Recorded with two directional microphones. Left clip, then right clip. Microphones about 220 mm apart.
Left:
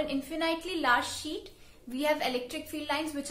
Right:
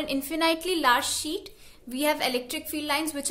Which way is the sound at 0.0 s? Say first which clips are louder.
Right 5 dB; 50° right (ahead or behind).